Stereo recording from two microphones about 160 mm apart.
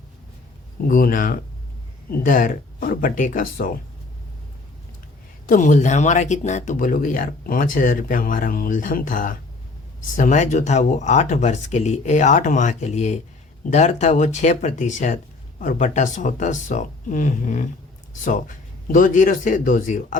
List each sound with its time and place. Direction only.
0.9 s speech: 60° left (ahead or behind)
5.5 s speech: 55° left (ahead or behind)